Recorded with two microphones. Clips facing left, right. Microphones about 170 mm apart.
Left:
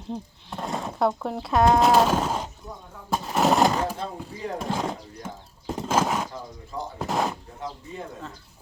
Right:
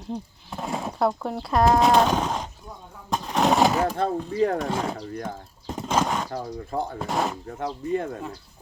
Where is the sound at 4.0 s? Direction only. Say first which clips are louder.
Right 10 dB; 60° right (ahead or behind).